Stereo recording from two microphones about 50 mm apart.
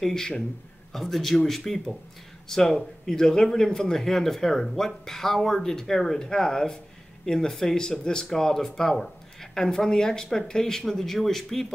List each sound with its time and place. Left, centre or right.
0.0 s a man's voice: centre